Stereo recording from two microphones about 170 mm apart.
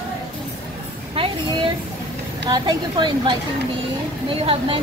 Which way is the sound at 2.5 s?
25° right (ahead or behind).